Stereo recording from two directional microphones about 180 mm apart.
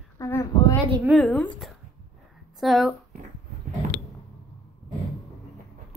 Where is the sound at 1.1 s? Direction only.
5° left (ahead or behind).